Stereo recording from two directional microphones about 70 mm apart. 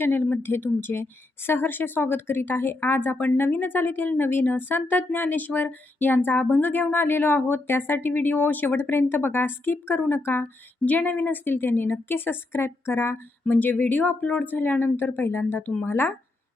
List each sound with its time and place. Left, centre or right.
0.0 s speech: left